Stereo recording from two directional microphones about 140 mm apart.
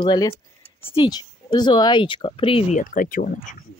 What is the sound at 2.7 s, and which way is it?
Speech, 75° left (ahead or behind).